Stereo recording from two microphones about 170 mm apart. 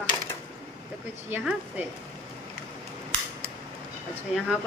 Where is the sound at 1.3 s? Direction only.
5° right (ahead or behind).